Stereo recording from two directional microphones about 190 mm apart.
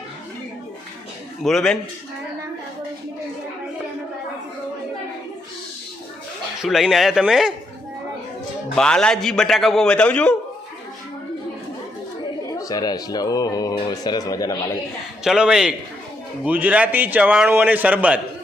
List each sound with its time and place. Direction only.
1.5 s a man's voice: centre (ahead or behind)
6.6 s a man's voice: centre (ahead or behind)
8.7 s a man's voice: 5° left (ahead or behind)
12.5 s speech: 20° left (ahead or behind)
15.2 s a man's voice: 5° right (ahead or behind)